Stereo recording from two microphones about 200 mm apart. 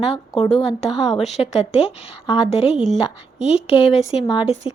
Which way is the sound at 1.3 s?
30° left (ahead or behind).